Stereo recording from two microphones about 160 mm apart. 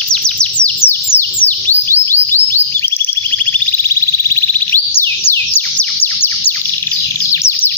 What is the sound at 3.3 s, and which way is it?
Chirp tone, 10° left (ahead or behind).